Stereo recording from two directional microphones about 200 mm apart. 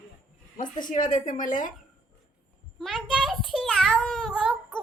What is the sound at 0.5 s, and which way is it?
A woman's voice, 40° left (ahead or behind).